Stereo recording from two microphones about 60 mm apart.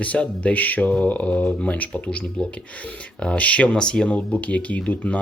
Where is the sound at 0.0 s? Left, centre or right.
Left.